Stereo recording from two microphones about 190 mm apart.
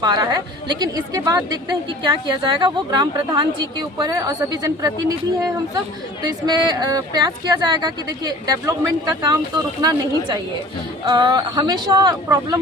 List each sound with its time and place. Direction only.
0.0 s a woman's voice: 20° right (ahead or behind)